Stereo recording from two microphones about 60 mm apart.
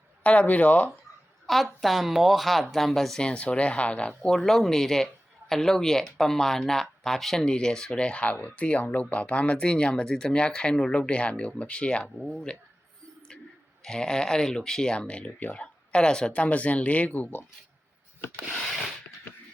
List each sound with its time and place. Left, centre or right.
0.2 s speech: left
1.5 s speech: centre
3.2 s speech: centre
4.2 s a man's voice: centre
13.8 s a man's voice: centre; by 17.4 s left